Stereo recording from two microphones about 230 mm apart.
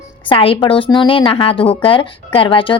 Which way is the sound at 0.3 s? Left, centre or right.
Left.